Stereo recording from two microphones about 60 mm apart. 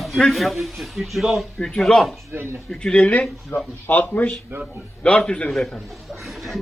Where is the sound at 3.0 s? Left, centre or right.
Left.